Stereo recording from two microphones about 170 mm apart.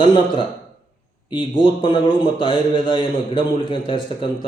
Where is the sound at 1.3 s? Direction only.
30° left (ahead or behind).